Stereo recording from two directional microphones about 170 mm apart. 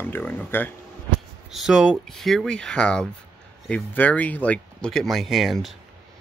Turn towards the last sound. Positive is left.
turn(degrees=0)  # may be behind; listen again after turning